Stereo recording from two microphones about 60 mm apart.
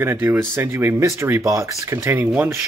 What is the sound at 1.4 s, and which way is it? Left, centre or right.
Speech, right.